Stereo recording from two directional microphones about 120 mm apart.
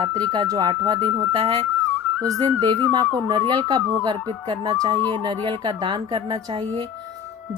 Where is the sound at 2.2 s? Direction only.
30° right (ahead or behind).